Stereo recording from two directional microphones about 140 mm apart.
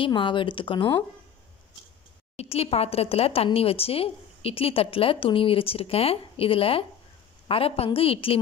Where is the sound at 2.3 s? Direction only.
45° left (ahead or behind).